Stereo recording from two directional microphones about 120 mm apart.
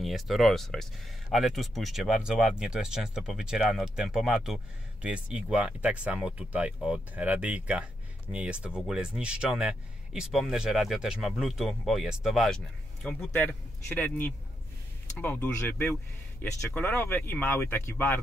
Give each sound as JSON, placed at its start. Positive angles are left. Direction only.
{"t": 0.0, "sound": "speech", "side_deg": 0}